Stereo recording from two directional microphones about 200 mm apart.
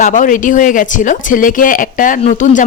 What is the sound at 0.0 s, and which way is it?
Speech, 40° left (ahead or behind).